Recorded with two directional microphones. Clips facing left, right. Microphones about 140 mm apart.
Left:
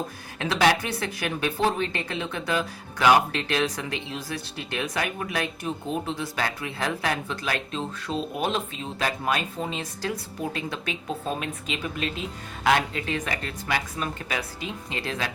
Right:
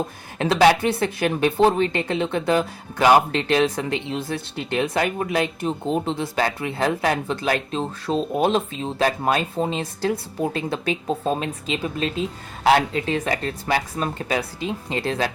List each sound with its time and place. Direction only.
0.3 s speech: 30° right (ahead or behind)